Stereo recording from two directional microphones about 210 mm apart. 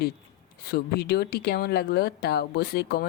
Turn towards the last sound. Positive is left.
turn(degrees=45)  # may be behind; listen again after turning